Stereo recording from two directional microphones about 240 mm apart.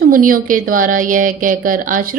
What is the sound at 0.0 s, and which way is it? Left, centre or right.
A woman's voice, right.